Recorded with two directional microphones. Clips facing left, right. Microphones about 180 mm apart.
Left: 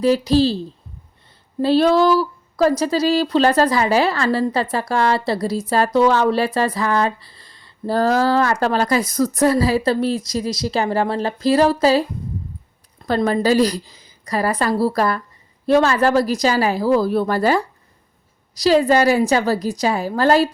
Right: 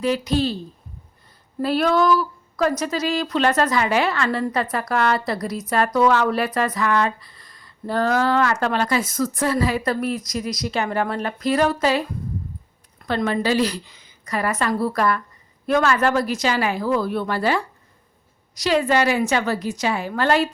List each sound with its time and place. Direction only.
0.0 s speech: 35° left (ahead or behind)
1.6 s speech: 30° left (ahead or behind)
13.1 s speech: 40° left (ahead or behind)